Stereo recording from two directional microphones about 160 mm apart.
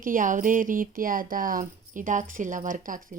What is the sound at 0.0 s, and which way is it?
A woman's voice, 55° right (ahead or behind).